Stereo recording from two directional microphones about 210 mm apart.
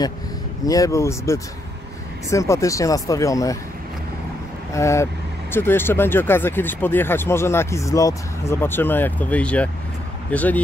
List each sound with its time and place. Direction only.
0.7 s speech: 15° left (ahead or behind)
4.7 s speech: 15° left (ahead or behind)